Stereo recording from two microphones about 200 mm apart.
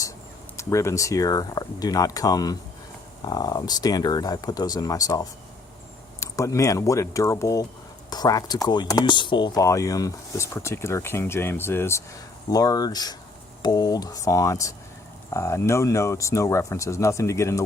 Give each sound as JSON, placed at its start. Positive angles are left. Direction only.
{"t": 0.5, "sound": "speech", "side_deg": 15}
{"t": 6.3, "sound": "speech", "side_deg": 15}